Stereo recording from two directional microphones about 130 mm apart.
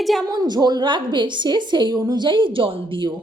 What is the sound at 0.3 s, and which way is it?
A woman's voice, 30° right (ahead or behind).